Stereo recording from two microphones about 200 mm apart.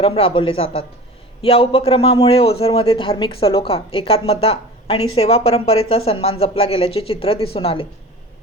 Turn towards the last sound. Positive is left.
turn(degrees=30)  # may be behind; listen again after turning